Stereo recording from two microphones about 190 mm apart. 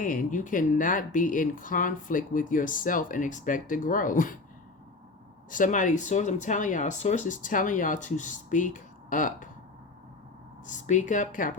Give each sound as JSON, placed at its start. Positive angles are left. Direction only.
{"t": 0.0, "sound": "speech", "side_deg": 45}
{"t": 5.5, "sound": "speech", "side_deg": 45}
{"t": 10.8, "sound": "speech", "side_deg": 40}